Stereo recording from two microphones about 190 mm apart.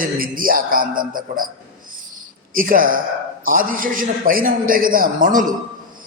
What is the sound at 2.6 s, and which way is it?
Music, 45° right (ahead or behind).